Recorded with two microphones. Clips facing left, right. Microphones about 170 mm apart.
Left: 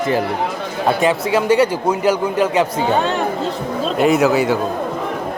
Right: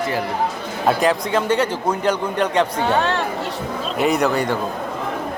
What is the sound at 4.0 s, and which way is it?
Speech, centre (ahead or behind).